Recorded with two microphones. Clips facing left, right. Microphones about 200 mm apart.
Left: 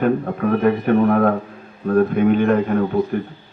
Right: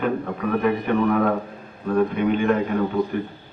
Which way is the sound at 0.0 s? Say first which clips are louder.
Left 5 dB; 50° left (ahead or behind).